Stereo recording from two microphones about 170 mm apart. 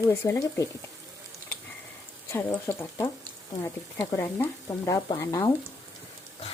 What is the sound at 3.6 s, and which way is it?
Stir, 15° left (ahead or behind).